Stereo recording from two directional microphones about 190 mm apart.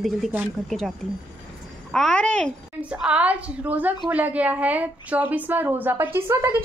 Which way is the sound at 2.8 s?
5° right (ahead or behind).